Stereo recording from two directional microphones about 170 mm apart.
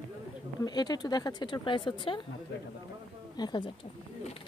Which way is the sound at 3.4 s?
25° left (ahead or behind).